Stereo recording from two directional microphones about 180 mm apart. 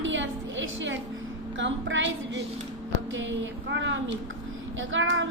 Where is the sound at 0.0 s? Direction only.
90° right.